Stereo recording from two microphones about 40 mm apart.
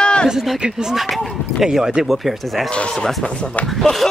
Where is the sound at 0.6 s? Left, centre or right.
Centre.